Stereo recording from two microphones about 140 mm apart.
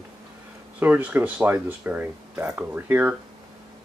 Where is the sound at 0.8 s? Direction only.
10° right (ahead or behind).